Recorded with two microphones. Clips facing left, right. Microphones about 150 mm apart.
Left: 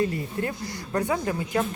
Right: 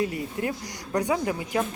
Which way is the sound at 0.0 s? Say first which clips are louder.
Left 1 dB; 15° right (ahead or behind).